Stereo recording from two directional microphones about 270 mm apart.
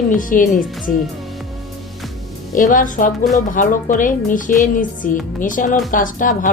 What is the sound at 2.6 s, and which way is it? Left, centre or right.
Speech, left.